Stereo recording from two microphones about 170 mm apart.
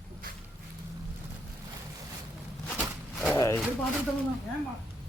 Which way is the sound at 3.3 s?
20° left (ahead or behind).